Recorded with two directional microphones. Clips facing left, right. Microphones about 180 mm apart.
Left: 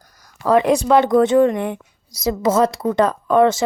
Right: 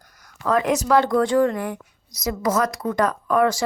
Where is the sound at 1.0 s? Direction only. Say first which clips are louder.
Left 5 dB; 20° left (ahead or behind).